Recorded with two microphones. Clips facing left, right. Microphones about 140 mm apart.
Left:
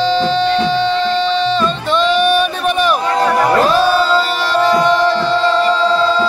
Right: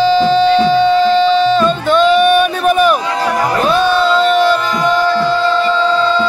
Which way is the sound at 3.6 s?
35° left (ahead or behind).